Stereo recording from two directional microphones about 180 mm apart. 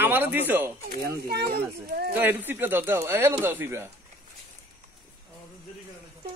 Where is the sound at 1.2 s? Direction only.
60° right (ahead or behind).